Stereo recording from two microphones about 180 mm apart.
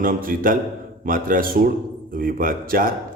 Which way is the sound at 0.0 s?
50° right (ahead or behind).